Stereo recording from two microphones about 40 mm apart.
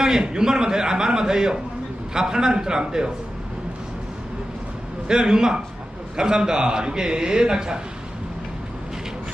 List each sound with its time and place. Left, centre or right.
0.0 s a man's voice: centre
5.0 s a man's voice: centre